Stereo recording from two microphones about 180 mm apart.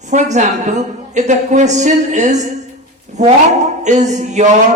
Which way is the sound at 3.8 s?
40° right (ahead or behind).